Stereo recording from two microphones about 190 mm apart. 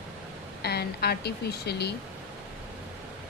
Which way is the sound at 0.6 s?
55° left (ahead or behind).